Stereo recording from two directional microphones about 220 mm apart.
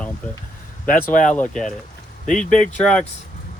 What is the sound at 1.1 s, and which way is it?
Speech, 35° left (ahead or behind).